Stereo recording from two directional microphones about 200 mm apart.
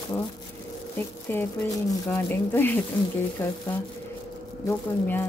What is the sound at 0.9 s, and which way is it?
A woman's voice, 10° left (ahead or behind).